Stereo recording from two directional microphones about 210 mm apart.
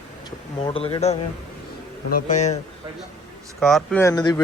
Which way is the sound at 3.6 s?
Centre (ahead or behind).